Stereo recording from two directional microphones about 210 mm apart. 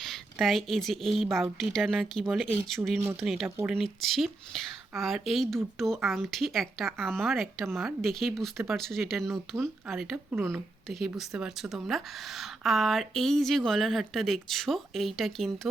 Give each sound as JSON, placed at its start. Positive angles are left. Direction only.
{"t": 0.0, "sound": "a woman's voice", "side_deg": 0}